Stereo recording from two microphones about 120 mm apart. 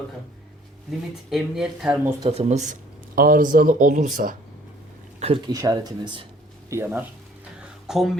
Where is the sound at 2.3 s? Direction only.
65° right (ahead or behind).